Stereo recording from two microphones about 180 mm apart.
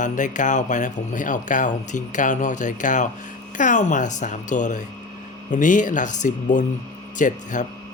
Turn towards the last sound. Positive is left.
turn(degrees=45)  # may be behind; listen again after turning